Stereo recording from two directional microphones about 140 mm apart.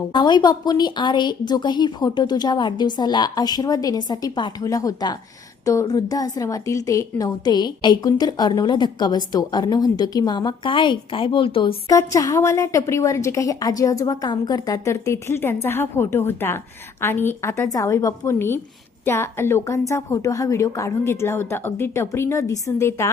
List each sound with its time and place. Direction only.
0.1 s a woman's voice: 30° left (ahead or behind)
11.9 s a woman's voice: 25° left (ahead or behind)